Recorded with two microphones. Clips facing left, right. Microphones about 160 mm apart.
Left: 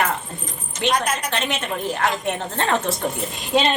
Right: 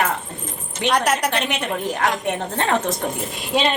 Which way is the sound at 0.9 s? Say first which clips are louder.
Right 3 dB; 70° right (ahead or behind).